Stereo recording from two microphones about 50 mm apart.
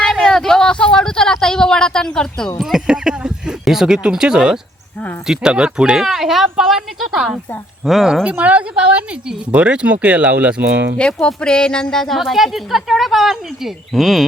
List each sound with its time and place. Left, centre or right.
0.2 s a sound: centre
2.6 s a woman's voice: centre
2.8 s speech: centre
6.1 s a woman's voice: centre
8.2 s speech: right
10.9 s speech: centre
11.3 s a sound: centre
12.2 s a woman's voice: centre